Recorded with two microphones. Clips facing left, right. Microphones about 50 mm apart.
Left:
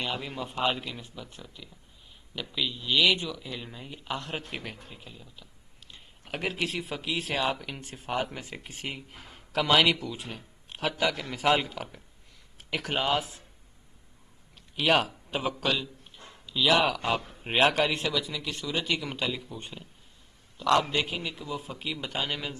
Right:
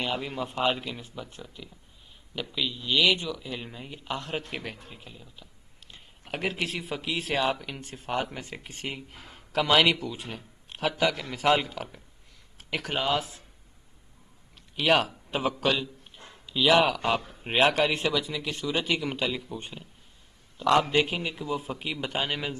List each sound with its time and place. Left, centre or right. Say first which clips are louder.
0.0 s speech: right 3 dB; centre
14.8 s a man's voice: right 1 dB; centre
20.5 s a man's voice: right 2 dB; centre